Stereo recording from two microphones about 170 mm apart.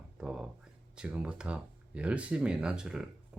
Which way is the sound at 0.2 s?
5° right (ahead or behind).